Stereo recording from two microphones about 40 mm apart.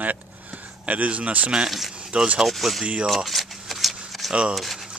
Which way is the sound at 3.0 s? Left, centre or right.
Centre.